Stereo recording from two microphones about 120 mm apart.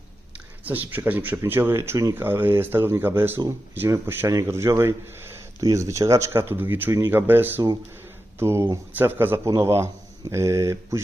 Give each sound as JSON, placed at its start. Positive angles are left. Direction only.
{"t": 0.6, "sound": "speech", "side_deg": -15}